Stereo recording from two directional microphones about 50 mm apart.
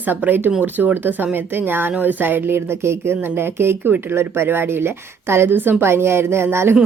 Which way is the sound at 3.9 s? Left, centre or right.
Right.